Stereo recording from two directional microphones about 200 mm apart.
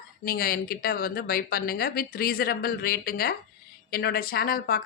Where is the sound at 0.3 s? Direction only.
50° left (ahead or behind).